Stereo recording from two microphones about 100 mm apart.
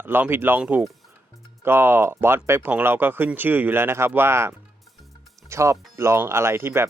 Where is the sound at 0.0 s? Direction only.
20° right (ahead or behind).